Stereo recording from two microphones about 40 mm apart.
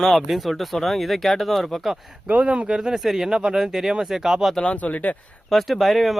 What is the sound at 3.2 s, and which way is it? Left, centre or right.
Speech, centre.